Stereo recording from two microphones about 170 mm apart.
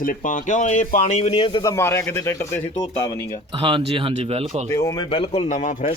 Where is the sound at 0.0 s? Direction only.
50° left (ahead or behind).